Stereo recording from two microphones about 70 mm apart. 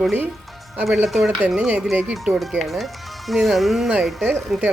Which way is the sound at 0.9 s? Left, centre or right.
Centre.